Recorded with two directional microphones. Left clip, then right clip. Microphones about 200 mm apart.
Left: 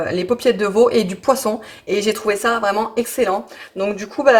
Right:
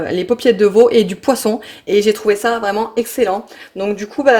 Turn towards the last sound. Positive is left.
turn(degrees=-40)  # may be behind; listen again after turning